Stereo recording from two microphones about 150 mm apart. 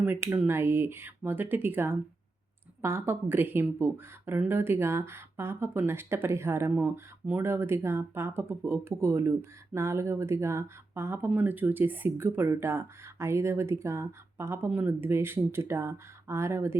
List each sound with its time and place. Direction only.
0.0 s speech: 15° right (ahead or behind)